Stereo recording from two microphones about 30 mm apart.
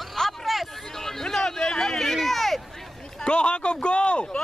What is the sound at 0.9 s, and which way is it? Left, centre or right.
Speech, centre.